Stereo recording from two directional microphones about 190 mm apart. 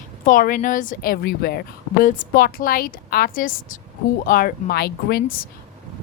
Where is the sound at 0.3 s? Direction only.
45° left (ahead or behind).